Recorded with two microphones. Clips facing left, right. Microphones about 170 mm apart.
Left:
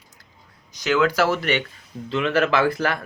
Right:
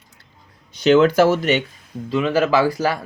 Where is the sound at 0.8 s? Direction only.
25° right (ahead or behind).